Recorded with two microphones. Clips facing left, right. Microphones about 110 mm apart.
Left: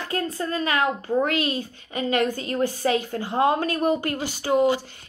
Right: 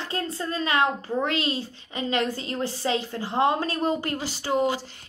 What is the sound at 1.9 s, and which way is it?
Speech, 50° left (ahead or behind).